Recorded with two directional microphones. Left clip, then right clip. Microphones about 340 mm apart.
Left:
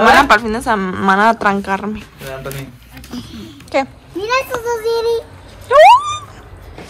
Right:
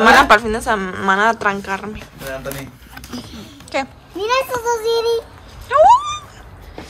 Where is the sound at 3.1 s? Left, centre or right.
Centre.